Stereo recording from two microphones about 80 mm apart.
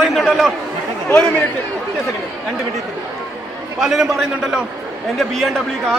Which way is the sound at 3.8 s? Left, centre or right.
Centre.